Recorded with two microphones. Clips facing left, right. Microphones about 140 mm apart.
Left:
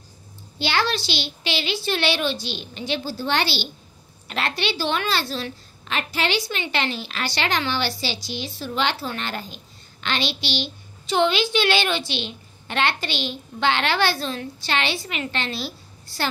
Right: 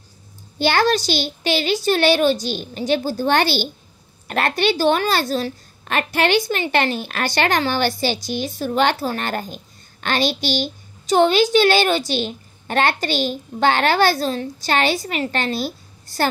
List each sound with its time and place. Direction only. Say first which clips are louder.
0.6 s a woman's voice: right 6 dB; 45° right (ahead or behind)